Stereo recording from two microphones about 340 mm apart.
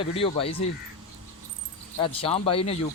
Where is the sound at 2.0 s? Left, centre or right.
Centre.